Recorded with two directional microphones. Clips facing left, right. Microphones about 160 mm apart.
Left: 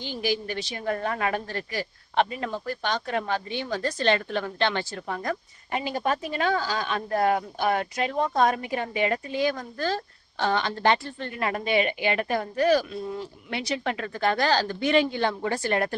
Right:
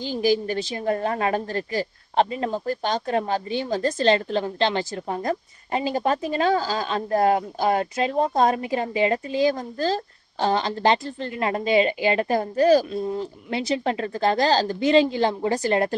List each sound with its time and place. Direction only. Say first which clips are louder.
0.1 s a man's voice: right 7 dB; 40° right (ahead or behind)
0.8 s a man's voice: right 3 dB; 30° right (ahead or behind)